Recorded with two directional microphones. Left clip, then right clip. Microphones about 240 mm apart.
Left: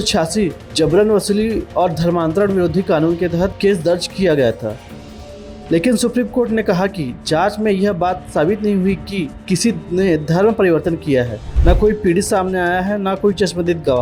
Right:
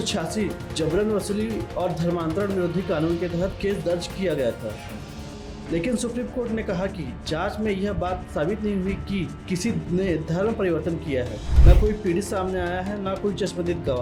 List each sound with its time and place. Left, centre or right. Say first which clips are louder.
0.0 s speech: left 10 dB; left
5.7 s speech: left 11 dB; left